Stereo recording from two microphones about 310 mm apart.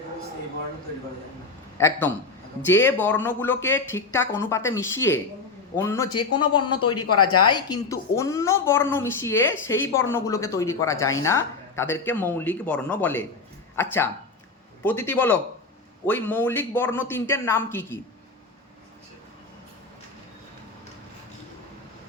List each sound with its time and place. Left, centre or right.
1.8 s speech: centre
7.1 s speech: left
7.4 s a man's voice: centre